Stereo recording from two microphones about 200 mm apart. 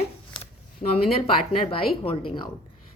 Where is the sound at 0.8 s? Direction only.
30° left (ahead or behind).